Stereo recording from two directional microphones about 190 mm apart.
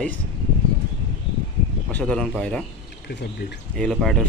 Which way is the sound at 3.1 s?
60° left (ahead or behind).